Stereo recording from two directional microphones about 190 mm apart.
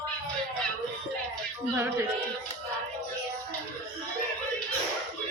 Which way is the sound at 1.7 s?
10° right (ahead or behind).